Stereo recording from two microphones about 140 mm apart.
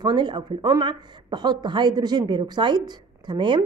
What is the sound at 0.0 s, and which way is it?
Speech, 30° right (ahead or behind).